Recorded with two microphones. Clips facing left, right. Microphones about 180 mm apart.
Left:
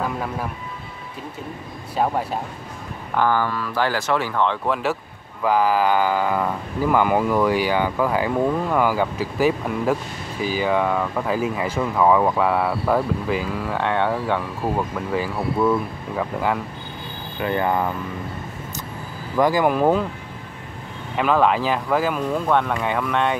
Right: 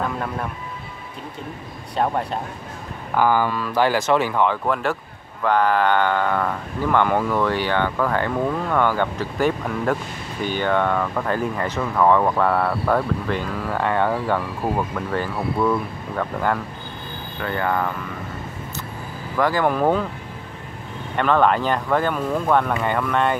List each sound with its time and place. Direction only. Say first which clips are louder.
0.0 s speech: even; 5° left (ahead or behind)
2.0 s speech: even; 5° left (ahead or behind)
3.2 s speech: right 2 dB; 15° right (ahead or behind)
4.5 s speech: even; centre (ahead or behind)
17.4 s speech: left 2 dB; 20° left (ahead or behind)
19.3 s speech: left 2 dB; 15° left (ahead or behind)
21.2 s speech: even; 5° left (ahead or behind)